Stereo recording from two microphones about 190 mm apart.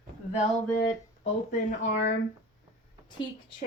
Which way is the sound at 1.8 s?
40° left (ahead or behind).